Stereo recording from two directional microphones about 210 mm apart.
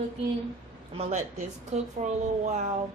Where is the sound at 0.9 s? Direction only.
35° right (ahead or behind).